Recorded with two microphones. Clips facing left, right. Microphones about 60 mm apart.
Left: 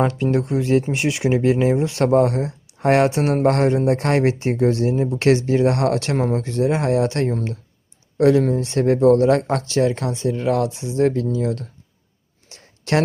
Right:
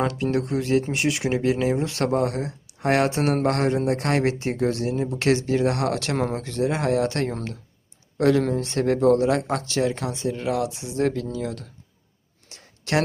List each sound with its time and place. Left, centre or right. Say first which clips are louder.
0.1 s speech: left 4 dB; left
3.2 s speech: left 3 dB; centre
3.4 s speech: left 5 dB; left
8.4 s speech: left 4 dB; centre
8.7 s speech: left 4 dB; left
12.5 s a sound: left 4 dB; left